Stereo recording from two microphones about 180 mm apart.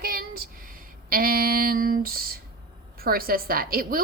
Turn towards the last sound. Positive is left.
turn(degrees=-55)  # may be behind; listen again after turning